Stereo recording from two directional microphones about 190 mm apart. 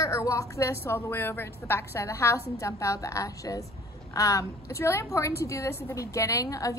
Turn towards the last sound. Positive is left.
turn(degrees=15)  # may be behind; listen again after turning